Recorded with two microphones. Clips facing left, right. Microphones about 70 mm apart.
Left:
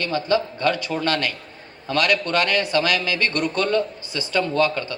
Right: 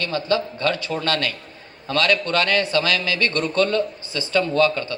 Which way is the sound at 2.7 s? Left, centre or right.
Left.